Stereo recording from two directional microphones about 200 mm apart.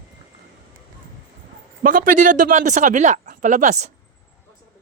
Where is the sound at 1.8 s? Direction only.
45° right (ahead or behind).